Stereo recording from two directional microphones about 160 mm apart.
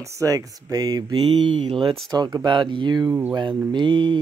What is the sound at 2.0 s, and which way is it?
Speech, 25° right (ahead or behind).